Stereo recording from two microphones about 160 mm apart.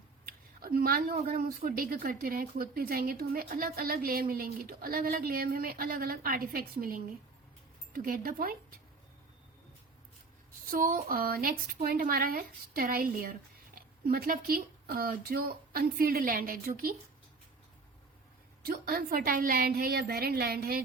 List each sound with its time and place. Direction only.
0.3 s speech: 65° right (ahead or behind)
10.7 s speech: 60° right (ahead or behind)
18.6 s speech: 75° right (ahead or behind)